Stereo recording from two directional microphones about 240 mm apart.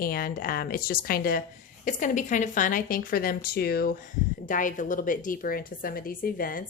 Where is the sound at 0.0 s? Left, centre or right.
Left.